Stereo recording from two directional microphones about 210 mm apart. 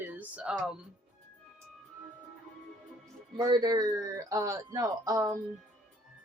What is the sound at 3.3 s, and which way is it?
Speech, 20° right (ahead or behind).